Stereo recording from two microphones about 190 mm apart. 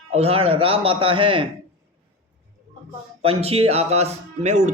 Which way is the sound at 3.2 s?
30° right (ahead or behind).